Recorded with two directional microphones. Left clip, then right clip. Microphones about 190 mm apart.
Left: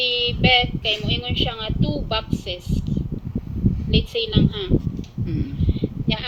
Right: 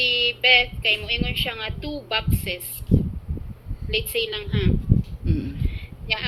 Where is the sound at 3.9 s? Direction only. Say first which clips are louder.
Even; 45° right (ahead or behind).